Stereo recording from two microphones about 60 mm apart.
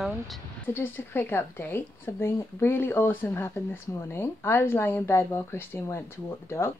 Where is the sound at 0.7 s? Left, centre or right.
Left.